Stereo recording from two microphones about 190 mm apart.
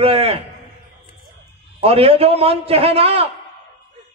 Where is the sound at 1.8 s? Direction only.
30° right (ahead or behind).